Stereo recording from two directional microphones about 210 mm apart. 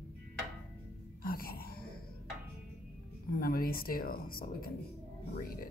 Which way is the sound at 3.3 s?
45° left (ahead or behind).